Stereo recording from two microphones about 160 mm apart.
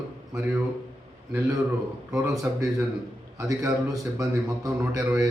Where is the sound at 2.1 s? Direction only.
20° right (ahead or behind).